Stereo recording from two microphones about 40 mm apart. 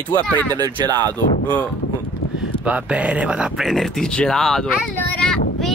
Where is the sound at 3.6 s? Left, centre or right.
Centre.